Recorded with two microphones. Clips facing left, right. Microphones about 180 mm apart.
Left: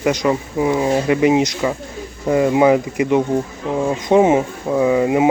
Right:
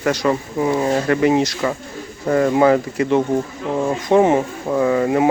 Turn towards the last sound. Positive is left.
turn(degrees=15)  # may be behind; listen again after turning